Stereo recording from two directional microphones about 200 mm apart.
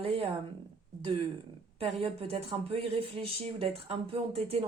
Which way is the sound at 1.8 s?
25° right (ahead or behind).